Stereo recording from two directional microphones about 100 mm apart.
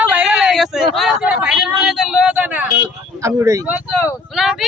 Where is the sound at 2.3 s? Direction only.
20° right (ahead or behind).